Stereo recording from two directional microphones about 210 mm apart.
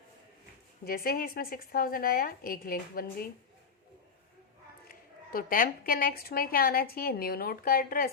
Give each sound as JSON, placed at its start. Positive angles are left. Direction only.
{"t": 0.9, "sound": "a woman's voice", "side_deg": 45}
{"t": 4.9, "sound": "a woman's voice", "side_deg": 45}